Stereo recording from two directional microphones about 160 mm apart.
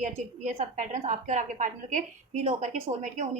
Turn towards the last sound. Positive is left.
turn(degrees=-45)  # may be behind; listen again after turning